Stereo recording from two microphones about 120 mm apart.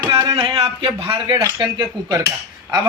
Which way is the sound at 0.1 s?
50° right (ahead or behind).